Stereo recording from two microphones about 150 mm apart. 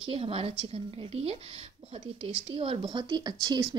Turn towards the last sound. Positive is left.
turn(degrees=-30)  # may be behind; listen again after turning